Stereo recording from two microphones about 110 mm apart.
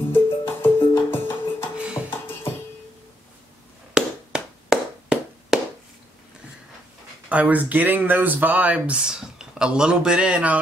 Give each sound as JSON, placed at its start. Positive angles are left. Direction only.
{"t": 0.1, "sound": "music", "side_deg": 20}
{"t": 3.9, "sound": "a sound", "side_deg": -5}
{"t": 7.2, "sound": "speech", "side_deg": -15}